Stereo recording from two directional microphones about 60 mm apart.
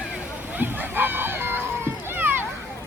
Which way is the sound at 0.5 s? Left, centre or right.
Right.